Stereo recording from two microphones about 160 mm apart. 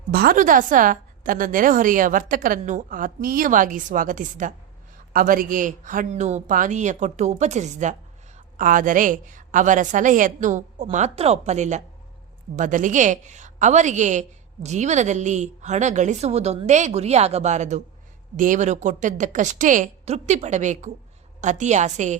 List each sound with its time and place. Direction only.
0.1 s a woman's voice: 70° right (ahead or behind); by 22.2 s 50° right (ahead or behind)